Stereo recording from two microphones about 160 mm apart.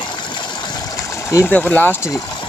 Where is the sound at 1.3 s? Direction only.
10° left (ahead or behind).